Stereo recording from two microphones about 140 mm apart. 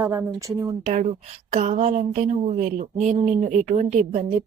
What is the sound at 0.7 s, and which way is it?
A woman's voice, 60° right (ahead or behind).